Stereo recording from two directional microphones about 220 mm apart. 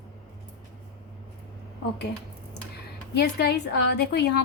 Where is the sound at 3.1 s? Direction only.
50° left (ahead or behind).